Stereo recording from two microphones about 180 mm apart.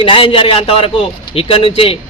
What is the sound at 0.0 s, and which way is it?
A man's voice, 30° left (ahead or behind).